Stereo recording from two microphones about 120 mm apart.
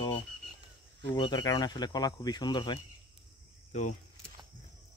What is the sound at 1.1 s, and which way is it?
Speech, 35° left (ahead or behind).